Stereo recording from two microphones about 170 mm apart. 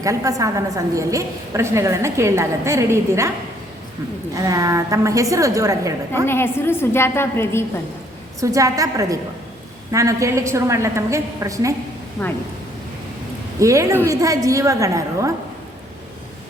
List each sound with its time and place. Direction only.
0.0 s a woman's voice: 20° right (ahead or behind)
4.4 s a woman's voice: 20° right (ahead or behind)
6.2 s a woman's voice: 15° left (ahead or behind)
8.4 s a woman's voice: 20° right (ahead or behind)
13.6 s a woman's voice: 20° right (ahead or behind)